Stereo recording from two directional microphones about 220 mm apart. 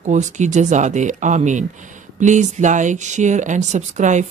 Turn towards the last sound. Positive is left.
turn(degrees=-35)  # may be behind; listen again after turning